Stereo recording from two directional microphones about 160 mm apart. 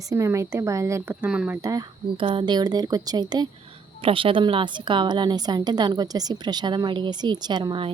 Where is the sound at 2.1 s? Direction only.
30° right (ahead or behind).